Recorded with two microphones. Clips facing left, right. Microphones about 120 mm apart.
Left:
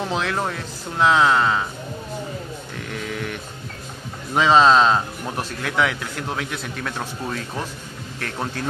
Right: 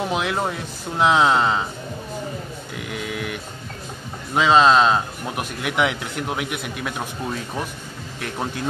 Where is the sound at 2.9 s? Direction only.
5° right (ahead or behind).